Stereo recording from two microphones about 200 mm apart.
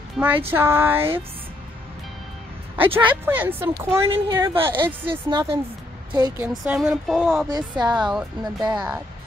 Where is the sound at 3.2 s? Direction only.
10° right (ahead or behind).